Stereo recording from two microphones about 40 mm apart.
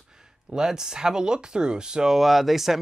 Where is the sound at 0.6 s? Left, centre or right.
Centre.